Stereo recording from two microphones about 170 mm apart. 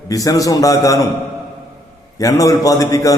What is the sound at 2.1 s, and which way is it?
A man's voice, 20° left (ahead or behind).